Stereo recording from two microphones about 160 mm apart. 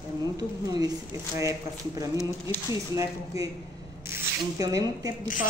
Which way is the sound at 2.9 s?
20° right (ahead or behind).